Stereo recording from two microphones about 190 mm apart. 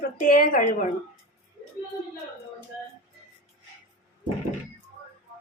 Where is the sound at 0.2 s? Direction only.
45° left (ahead or behind).